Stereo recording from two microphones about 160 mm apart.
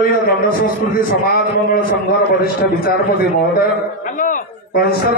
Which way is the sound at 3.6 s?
55° left (ahead or behind).